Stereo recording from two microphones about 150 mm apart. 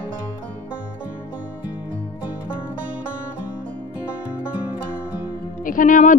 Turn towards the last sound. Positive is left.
turn(degrees=60)  # may be behind; listen again after turning